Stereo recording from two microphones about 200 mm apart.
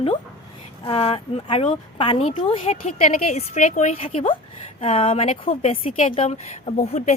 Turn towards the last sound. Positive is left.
turn(degrees=35)  # may be behind; listen again after turning